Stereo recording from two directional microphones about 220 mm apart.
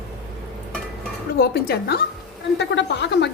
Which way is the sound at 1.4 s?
45° left (ahead or behind).